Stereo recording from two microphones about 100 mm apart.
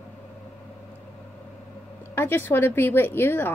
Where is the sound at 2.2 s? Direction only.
20° left (ahead or behind).